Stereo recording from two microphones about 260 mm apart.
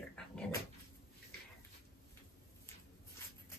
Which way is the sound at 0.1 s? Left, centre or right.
Centre.